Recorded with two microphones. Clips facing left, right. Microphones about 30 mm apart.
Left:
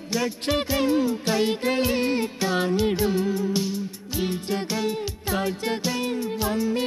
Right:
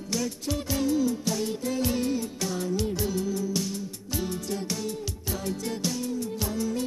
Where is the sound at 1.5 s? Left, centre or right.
Left.